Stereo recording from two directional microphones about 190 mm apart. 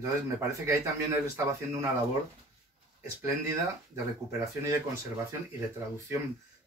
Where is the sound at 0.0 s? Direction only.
15° right (ahead or behind).